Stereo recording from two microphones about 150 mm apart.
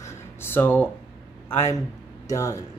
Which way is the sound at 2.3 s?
20° left (ahead or behind).